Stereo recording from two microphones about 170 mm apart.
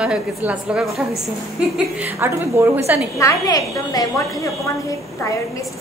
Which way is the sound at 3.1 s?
20° left (ahead or behind).